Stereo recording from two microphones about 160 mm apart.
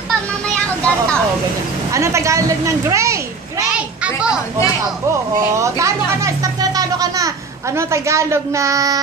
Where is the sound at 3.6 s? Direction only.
5° right (ahead or behind).